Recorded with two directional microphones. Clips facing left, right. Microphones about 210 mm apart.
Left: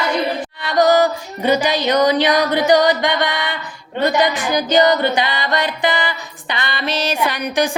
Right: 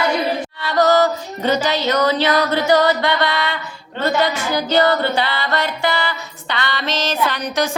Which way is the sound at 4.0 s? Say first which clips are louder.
Left 2 dB; 15° left (ahead or behind).